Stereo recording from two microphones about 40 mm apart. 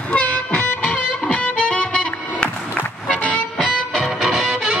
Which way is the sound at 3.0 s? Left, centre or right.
Left.